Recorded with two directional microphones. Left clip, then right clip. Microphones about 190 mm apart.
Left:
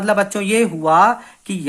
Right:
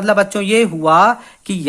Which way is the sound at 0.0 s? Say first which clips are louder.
Right 3 dB; 25° right (ahead or behind).